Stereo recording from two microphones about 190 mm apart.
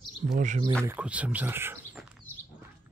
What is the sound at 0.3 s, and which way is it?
Speech, 40° right (ahead or behind).